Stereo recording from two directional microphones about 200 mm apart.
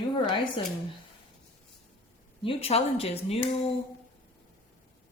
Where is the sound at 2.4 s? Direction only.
30° left (ahead or behind).